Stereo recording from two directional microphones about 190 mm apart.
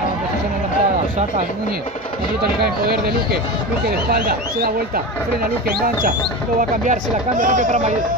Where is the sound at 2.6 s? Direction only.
55° right (ahead or behind).